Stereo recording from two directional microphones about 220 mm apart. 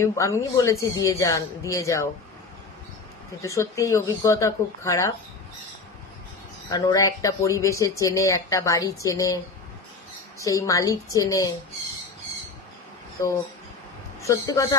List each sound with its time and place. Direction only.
0.0 s speech: 15° left (ahead or behind)
3.4 s speech: 15° left (ahead or behind)
6.7 s speech: 15° left (ahead or behind)
14.2 s a man's voice: 15° left (ahead or behind)